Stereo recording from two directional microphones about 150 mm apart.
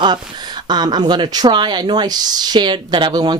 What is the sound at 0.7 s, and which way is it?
Speech, 30° right (ahead or behind).